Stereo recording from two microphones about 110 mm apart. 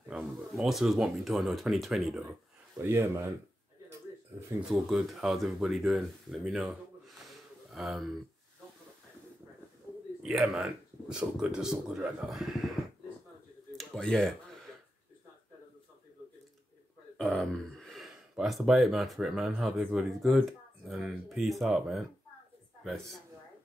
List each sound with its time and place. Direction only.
0.1 s speech: 5° right (ahead or behind)
2.8 s speech: 25° right (ahead or behind)
4.6 s speech: centre (ahead or behind)
9.9 s a sound: 15° left (ahead or behind)
10.2 s speech: 5° right (ahead or behind)
13.7 s speech: 5° left (ahead or behind)
17.2 s speech: 5° left (ahead or behind)